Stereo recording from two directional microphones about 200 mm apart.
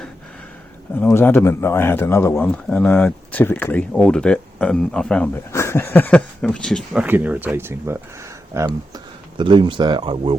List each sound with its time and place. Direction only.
0.9 s speech: 10° left (ahead or behind); by 8.7 s 15° right (ahead or behind)
9.4 s speech: 25° right (ahead or behind)